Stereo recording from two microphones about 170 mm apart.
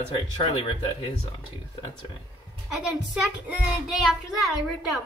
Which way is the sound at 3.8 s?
Centre (ahead or behind).